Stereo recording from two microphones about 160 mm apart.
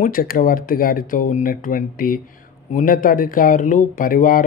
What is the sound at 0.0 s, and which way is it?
Speech, 65° left (ahead or behind).